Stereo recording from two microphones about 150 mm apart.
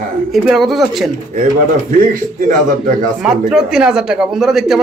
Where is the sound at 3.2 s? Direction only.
5° right (ahead or behind).